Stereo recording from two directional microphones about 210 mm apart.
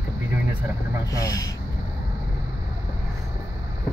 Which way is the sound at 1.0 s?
15° left (ahead or behind).